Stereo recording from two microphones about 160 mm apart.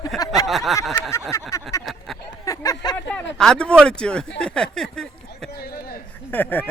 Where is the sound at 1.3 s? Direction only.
20° left (ahead or behind).